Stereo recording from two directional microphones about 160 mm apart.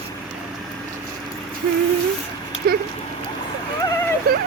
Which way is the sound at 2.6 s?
70° right (ahead or behind).